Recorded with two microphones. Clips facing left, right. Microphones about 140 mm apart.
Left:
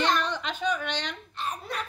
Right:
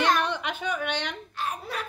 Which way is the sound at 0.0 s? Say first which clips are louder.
Right 2 dB; 10° right (ahead or behind).